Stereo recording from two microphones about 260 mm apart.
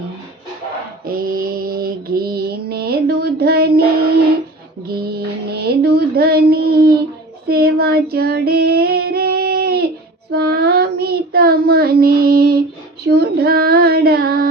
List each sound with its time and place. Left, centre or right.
1.0 s mantra: right
4.9 s child singing: right